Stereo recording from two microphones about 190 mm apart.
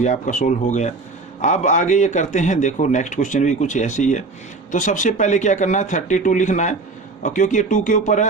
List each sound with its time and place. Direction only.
0.0 s a man's voice: 40° left (ahead or behind)